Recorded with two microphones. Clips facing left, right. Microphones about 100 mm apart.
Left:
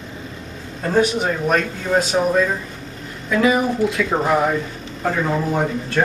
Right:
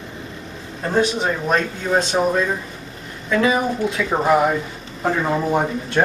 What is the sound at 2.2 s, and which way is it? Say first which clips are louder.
Speech: left 1 dB; 5° right (ahead or behind).